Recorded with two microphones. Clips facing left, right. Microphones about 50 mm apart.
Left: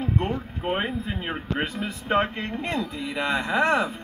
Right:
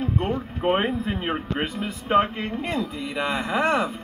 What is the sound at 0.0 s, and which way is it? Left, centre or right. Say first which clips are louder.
Boat: right 1 dB; centre.